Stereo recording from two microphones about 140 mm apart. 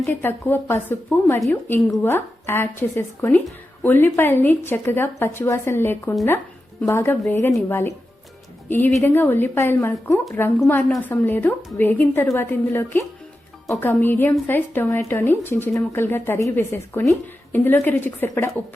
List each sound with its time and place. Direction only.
0.0 s a woman's voice: 15° left (ahead or behind)
9.0 s a woman's voice: 15° left (ahead or behind)